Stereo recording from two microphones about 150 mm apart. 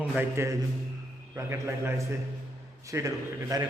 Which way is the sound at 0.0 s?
15° right (ahead or behind).